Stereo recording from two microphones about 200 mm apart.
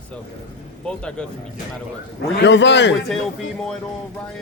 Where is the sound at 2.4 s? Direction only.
60° left (ahead or behind).